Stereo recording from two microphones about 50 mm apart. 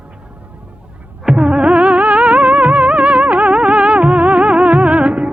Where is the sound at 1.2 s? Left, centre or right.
Centre.